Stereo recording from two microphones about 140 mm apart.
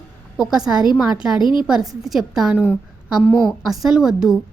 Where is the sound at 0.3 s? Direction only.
5° right (ahead or behind).